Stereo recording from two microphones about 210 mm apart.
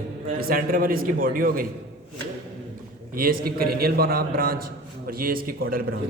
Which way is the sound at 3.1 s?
45° right (ahead or behind).